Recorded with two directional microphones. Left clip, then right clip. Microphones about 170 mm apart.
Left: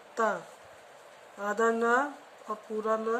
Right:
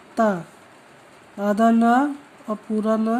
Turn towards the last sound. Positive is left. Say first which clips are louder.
# right 7 dB
turn(degrees=-60)  # may be behind; listen again after turning